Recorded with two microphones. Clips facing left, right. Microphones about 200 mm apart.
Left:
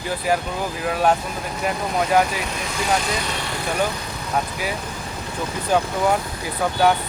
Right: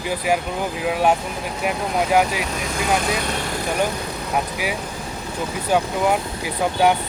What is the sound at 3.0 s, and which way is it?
Speech, 55° right (ahead or behind).